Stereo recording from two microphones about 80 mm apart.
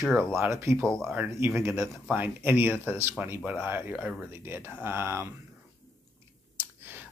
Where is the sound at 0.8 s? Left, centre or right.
Centre.